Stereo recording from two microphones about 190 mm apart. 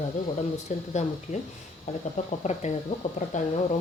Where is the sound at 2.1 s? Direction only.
35° left (ahead or behind).